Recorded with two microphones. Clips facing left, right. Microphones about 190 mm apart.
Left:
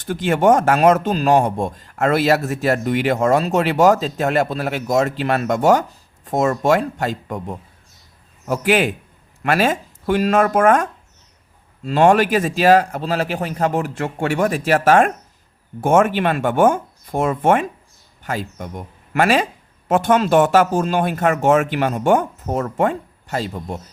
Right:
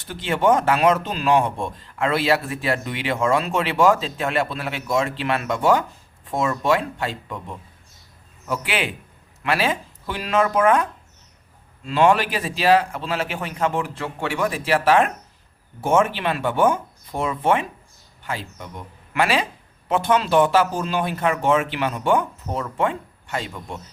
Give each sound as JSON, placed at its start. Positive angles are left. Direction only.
{"t": 0.0, "sound": "speech", "side_deg": 45}
{"t": 11.9, "sound": "speech", "side_deg": 45}